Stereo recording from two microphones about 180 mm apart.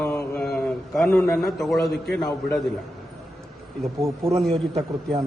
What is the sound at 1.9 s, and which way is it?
Speech, 70° left (ahead or behind).